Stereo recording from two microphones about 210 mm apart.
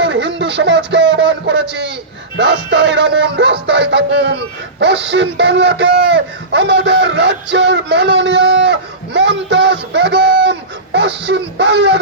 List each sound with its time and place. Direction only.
0.0 s music: 60° right (ahead or behind)
2.4 s speech: 55° right (ahead or behind)